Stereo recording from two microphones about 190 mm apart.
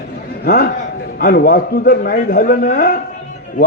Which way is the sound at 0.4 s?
50° left (ahead or behind).